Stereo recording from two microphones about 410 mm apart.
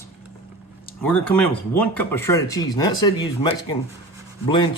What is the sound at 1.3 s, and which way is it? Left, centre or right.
Speech, centre.